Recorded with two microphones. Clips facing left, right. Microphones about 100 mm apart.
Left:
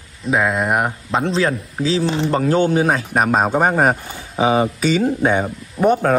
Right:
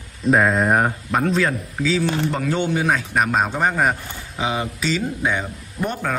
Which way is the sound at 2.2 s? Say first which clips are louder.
Left 6 dB; 45° left (ahead or behind).